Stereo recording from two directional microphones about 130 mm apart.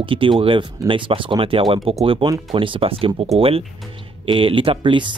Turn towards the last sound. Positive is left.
turn(degrees=-40)  # may be behind; listen again after turning